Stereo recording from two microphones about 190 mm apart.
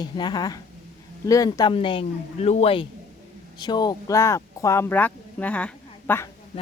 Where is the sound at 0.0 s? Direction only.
20° left (ahead or behind).